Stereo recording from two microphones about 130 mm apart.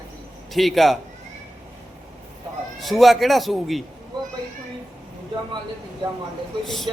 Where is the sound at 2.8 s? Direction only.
Centre (ahead or behind).